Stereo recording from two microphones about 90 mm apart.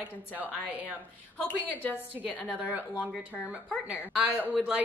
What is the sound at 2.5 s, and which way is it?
Speech, 15° right (ahead or behind).